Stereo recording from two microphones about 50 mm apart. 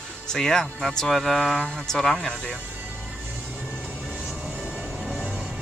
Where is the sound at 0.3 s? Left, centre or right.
Centre.